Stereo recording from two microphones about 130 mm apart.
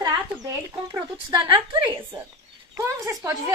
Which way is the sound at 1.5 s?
40° right (ahead or behind).